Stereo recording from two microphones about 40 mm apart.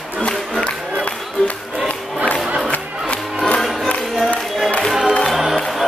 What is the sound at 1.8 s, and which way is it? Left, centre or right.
Music, left.